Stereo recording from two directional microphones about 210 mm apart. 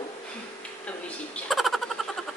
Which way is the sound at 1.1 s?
Centre (ahead or behind).